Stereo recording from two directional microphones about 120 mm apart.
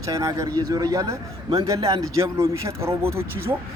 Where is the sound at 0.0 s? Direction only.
25° right (ahead or behind).